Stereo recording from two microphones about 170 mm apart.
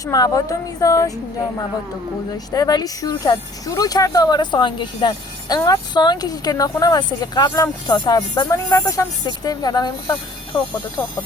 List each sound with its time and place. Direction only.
0.0 s speech: 20° left (ahead or behind)